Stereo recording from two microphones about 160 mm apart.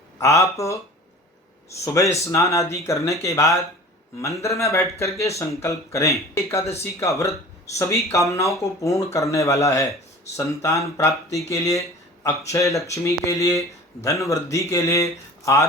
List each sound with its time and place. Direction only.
0.2 s speech: 20° left (ahead or behind)
1.8 s speech: 20° left (ahead or behind)